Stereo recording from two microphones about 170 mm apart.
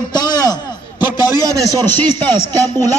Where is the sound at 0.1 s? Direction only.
25° left (ahead or behind).